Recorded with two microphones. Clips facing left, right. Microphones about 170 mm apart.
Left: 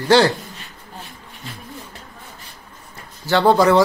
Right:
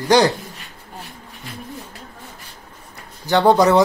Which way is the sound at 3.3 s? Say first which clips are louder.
Even; 20° right (ahead or behind).